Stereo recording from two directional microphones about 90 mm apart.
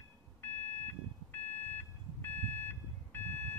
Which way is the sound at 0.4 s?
20° left (ahead or behind).